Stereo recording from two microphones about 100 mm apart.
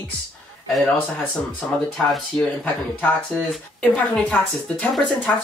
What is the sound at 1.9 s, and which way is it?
Speech, 5° left (ahead or behind).